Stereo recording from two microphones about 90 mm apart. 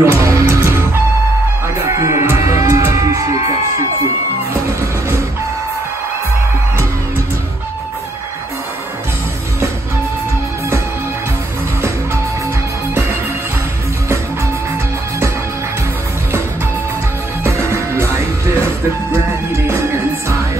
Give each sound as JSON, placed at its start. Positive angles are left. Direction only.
{"t": 0.0, "sound": "music", "side_deg": -35}
{"t": 17.4, "sound": "music", "side_deg": -30}